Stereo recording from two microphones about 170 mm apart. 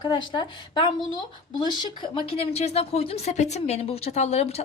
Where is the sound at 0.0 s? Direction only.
25° left (ahead or behind).